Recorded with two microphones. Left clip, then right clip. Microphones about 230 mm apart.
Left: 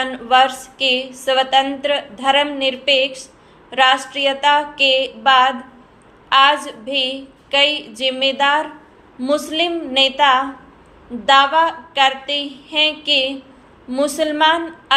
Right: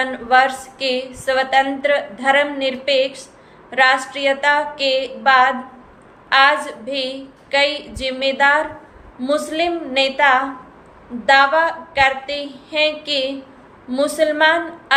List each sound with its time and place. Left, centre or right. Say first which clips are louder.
0.0 s a woman's voice: even; centre